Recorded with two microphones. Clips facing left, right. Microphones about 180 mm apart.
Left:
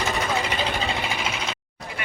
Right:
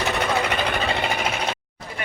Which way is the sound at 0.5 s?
60° right (ahead or behind).